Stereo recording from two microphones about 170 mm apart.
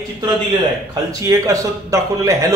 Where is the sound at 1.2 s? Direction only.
20° right (ahead or behind).